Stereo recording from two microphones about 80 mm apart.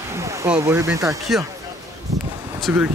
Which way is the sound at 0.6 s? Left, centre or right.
Right.